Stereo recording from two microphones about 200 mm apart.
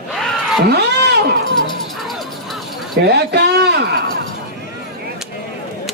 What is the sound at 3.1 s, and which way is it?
A man's voice, 55° right (ahead or behind).